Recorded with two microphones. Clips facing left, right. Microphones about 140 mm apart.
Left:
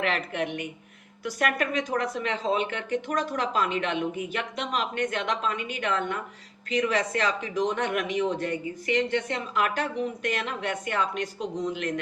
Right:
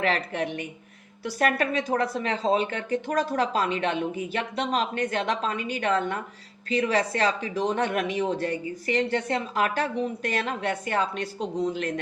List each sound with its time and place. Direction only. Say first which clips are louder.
0.0 s speech: right 2 dB; 35° right (ahead or behind)